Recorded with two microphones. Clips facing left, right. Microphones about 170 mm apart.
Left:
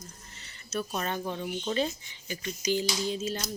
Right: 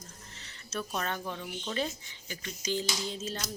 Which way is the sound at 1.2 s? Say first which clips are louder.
Left 5 dB; 30° left (ahead or behind).